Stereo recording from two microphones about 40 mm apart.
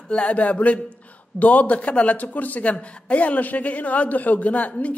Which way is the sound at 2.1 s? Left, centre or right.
Left.